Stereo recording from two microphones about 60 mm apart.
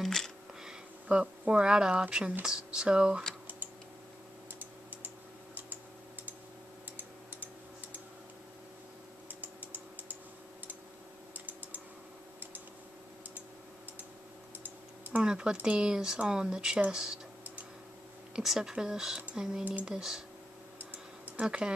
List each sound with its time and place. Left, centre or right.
0.0 s music: centre
1.0 s speech: centre
4.6 s typing: right
9.4 s typing: right
11.3 s typing: right
14.6 s typing: right
15.2 s speech: centre
18.3 s speech: centre
21.4 s speech: centre